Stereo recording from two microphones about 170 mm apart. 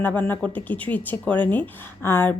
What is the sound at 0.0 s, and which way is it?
A woman's voice, 10° left (ahead or behind).